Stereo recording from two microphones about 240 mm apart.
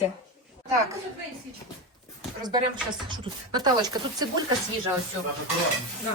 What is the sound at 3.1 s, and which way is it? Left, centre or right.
Speech, centre.